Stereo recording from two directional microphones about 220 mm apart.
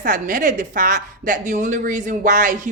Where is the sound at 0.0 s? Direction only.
40° right (ahead or behind).